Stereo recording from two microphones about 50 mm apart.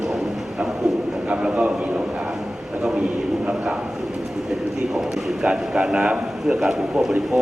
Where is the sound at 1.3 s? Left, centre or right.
Right.